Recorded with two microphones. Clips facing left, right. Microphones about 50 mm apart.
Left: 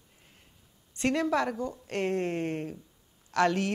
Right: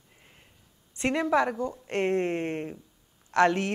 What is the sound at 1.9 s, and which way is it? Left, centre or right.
A man's voice, right.